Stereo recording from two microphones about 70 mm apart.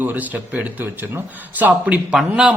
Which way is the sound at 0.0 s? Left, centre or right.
Right.